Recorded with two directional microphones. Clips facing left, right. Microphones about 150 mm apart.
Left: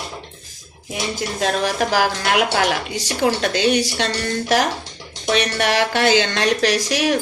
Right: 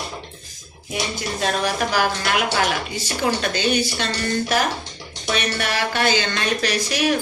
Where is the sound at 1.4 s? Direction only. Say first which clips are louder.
Left 2 dB; 90° left.